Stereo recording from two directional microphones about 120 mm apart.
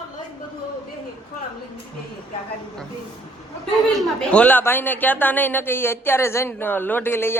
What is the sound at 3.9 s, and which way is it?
A man's voice, 5° left (ahead or behind).